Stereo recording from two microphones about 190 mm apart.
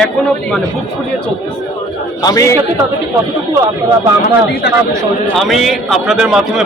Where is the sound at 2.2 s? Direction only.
20° left (ahead or behind).